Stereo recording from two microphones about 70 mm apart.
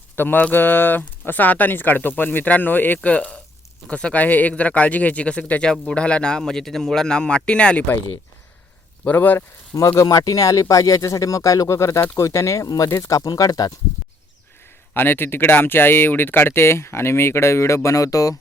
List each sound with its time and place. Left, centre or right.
0.2 s speech: left
9.0 s speech: left
9.7 s speech: left
14.9 s speech: left
17.8 s speech: left